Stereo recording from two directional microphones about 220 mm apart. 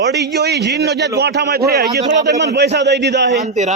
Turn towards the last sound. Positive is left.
turn(degrees=-30)  # may be behind; listen again after turning